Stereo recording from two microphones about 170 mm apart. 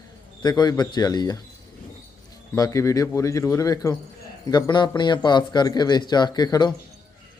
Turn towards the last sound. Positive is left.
turn(degrees=25)  # may be behind; listen again after turning